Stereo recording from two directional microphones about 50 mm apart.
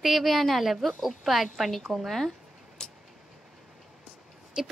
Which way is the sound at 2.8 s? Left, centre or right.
Centre.